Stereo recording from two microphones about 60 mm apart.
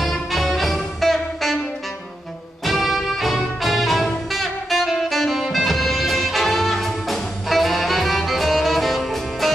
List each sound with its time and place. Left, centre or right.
0.0 s music: centre
2.6 s music: centre